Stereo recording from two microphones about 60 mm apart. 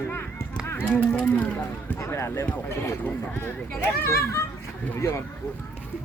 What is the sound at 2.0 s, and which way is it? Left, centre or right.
Speech, left.